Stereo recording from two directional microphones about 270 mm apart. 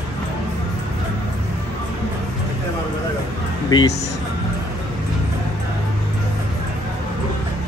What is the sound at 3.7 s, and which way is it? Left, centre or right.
Speech, centre.